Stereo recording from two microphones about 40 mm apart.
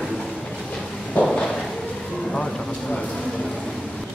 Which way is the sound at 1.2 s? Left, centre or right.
Left.